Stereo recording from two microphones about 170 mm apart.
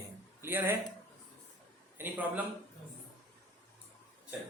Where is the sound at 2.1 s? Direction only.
10° right (ahead or behind).